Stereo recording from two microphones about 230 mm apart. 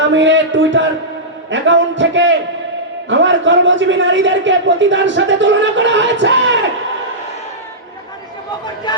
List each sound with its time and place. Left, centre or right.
0.1 s a man's voice: right